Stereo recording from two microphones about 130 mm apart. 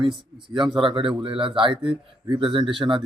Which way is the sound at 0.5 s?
35° right (ahead or behind).